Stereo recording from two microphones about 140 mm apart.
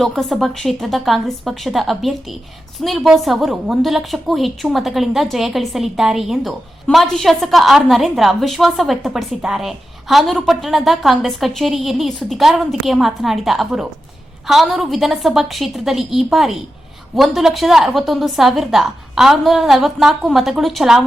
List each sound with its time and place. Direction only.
0.0 s a woman's voice: centre (ahead or behind)